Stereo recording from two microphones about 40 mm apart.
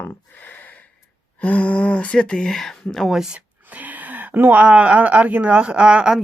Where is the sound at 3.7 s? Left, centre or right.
Right.